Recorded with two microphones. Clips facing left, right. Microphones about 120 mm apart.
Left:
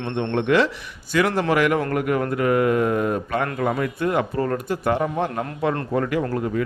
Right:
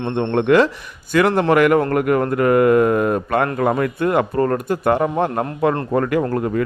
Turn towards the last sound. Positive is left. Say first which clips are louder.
# right 4 dB
turn(degrees=-55)  # may be behind; listen again after turning